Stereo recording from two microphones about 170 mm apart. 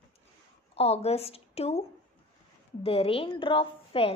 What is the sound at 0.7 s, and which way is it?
A woman's voice, 35° left (ahead or behind).